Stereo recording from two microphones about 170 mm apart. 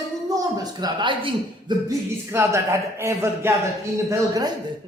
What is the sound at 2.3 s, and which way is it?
A man's voice, 15° right (ahead or behind).